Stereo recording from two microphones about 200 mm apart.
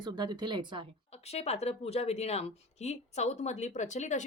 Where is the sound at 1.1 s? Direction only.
30° left (ahead or behind).